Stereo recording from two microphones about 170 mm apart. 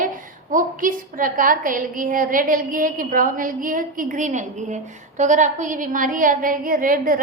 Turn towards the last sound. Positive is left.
turn(degrees=-55)  # may be behind; listen again after turning